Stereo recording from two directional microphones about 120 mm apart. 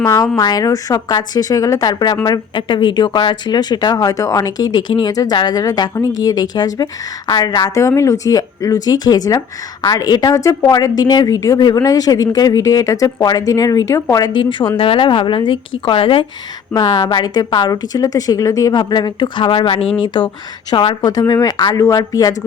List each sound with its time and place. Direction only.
0.1 s a woman's voice: 30° left (ahead or behind); by 16.2 s 45° left (ahead or behind)
16.7 s a woman's voice: 35° left (ahead or behind)